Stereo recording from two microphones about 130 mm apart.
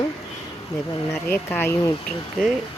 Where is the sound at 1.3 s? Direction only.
15° left (ahead or behind).